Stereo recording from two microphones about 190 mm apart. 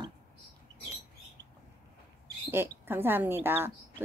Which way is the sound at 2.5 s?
10° right (ahead or behind).